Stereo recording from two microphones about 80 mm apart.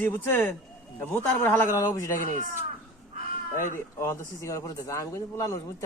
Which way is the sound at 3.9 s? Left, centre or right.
Left.